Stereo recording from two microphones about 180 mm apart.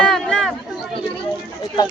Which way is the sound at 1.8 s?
20° left (ahead or behind).